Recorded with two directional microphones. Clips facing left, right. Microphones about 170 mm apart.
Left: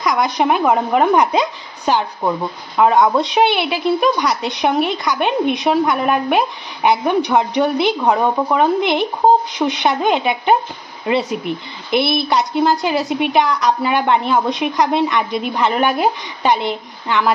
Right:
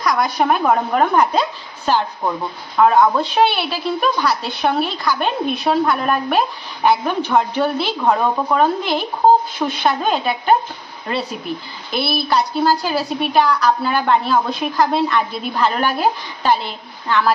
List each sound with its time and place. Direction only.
0.0 s a woman's voice: 20° left (ahead or behind)